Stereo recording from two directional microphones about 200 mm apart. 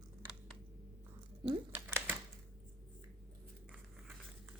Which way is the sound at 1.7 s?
10° right (ahead or behind).